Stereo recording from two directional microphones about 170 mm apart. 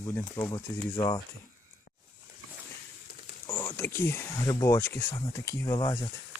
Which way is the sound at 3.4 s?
20° left (ahead or behind).